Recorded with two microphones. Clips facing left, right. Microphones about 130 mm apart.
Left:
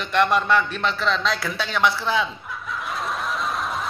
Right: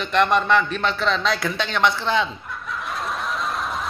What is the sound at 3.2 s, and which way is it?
Snicker, centre (ahead or behind).